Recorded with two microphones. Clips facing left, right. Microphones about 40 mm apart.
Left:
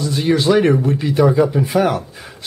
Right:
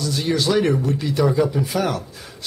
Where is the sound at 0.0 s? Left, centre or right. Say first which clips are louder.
Left 5 dB; left.